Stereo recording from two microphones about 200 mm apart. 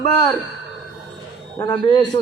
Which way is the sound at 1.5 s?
20° left (ahead or behind).